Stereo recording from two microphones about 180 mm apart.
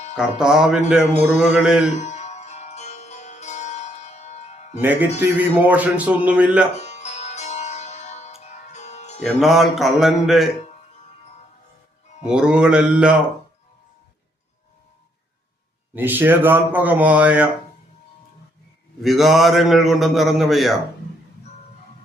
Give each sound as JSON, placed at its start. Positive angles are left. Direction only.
{"t": 0.2, "sound": "a man's voice", "side_deg": -5}
{"t": 2.0, "sound": "music", "side_deg": 40}
{"t": 4.8, "sound": "speech", "side_deg": -10}
{"t": 6.7, "sound": "music", "side_deg": 40}
{"t": 9.2, "sound": "a man's voice", "side_deg": 0}
{"t": 12.2, "sound": "a man's voice", "side_deg": -5}
{"t": 16.0, "sound": "speech", "side_deg": -10}
{"t": 19.0, "sound": "a man's voice", "side_deg": 0}